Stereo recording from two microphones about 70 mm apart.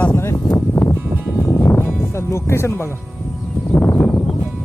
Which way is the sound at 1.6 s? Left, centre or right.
Left.